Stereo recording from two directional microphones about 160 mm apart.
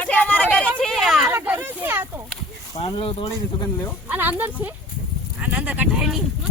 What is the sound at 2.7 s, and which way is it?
Speech, 40° left (ahead or behind).